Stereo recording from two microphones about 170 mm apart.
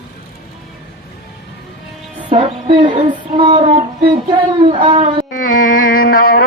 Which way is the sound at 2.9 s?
45° right (ahead or behind).